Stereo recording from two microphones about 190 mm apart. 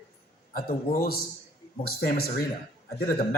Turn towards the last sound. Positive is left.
turn(degrees=55)  # may be behind; listen again after turning